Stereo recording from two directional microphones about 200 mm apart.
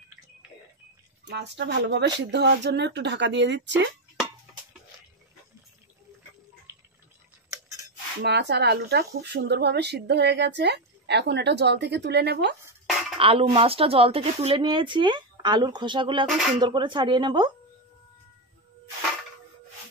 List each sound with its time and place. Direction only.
1.2 s speech: 60° right (ahead or behind)
7.4 s a sound: 15° right (ahead or behind)
8.2 s speech: 55° right (ahead or behind)
13.2 s speech: 25° right (ahead or behind)